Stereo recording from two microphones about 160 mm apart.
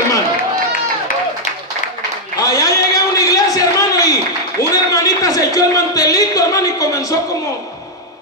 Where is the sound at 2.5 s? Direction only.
20° left (ahead or behind).